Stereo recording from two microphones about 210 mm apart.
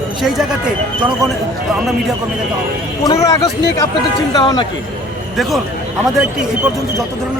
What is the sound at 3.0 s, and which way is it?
A man's voice, 15° left (ahead or behind).